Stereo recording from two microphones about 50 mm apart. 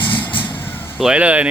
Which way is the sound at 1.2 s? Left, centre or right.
Right.